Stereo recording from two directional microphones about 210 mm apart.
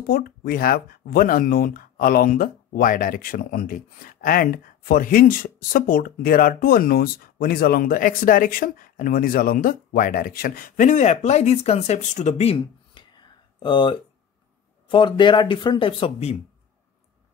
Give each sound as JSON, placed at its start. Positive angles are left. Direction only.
{"t": 0.0, "sound": "speech", "side_deg": 45}